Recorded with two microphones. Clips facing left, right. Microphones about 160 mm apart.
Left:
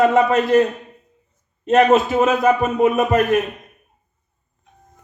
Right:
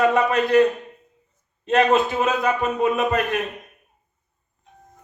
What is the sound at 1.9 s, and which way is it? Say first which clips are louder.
Speech: left 4 dB; 25° left (ahead or behind).